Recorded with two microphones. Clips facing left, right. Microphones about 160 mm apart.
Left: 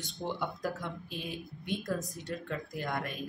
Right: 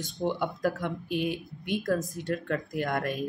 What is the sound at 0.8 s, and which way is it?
Speech, 65° right (ahead or behind).